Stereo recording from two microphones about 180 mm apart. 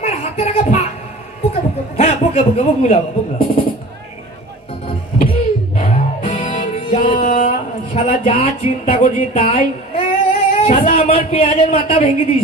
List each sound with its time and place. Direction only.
0.0 s a sound: 35° left (ahead or behind)
2.0 s a man's voice: 35° left (ahead or behind)
5.2 s music: 35° left (ahead or behind)
6.4 s music: 45° left (ahead or behind)
8.0 s speech: 30° left (ahead or behind)
10.5 s a sound: 35° left (ahead or behind)
10.9 s speech: 30° left (ahead or behind)